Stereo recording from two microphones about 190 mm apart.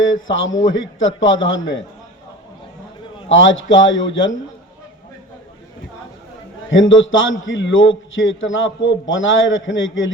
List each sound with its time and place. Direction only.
0.0 s a man's voice: 90° left
3.2 s a man's voice: 90° left
6.7 s a man's voice: 90° left